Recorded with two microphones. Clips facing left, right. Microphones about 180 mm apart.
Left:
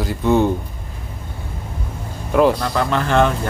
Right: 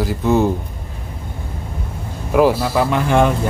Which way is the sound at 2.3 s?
5° right (ahead or behind).